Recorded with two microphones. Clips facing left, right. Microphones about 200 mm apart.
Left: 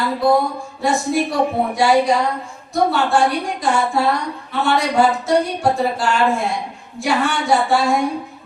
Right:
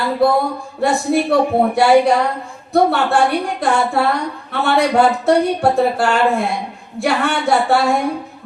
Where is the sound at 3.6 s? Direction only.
60° right (ahead or behind).